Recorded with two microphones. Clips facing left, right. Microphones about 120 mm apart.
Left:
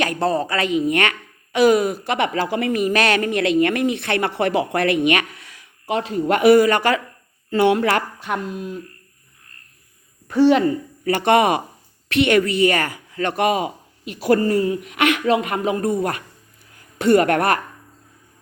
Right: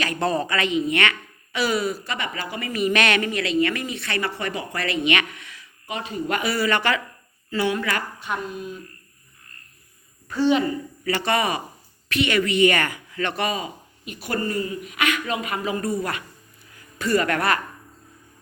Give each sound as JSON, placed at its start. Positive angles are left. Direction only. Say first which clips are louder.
{"t": 0.2, "sound": "speech", "louder": "left 3 dB", "side_deg": 30}
{"t": 2.0, "sound": "speech", "louder": "left 9 dB", "side_deg": 75}
{"t": 2.7, "sound": "speech", "louder": "left 1 dB", "side_deg": 40}
{"t": 5.0, "sound": "speech", "louder": "left 4 dB", "side_deg": 40}
{"t": 5.8, "sound": "speech", "louder": "left 7 dB", "side_deg": 90}
{"t": 6.6, "sound": "speech", "louder": "left 6 dB", "side_deg": 45}
{"t": 7.5, "sound": "speech", "louder": "left 7 dB", "side_deg": 60}
{"t": 11.0, "sound": "a woman's voice", "louder": "left 7 dB", "side_deg": 55}
{"t": 12.4, "sound": "speech", "louder": "left 2 dB", "side_deg": 40}
{"t": 17.0, "sound": "speech", "louder": "left 6 dB", "side_deg": 60}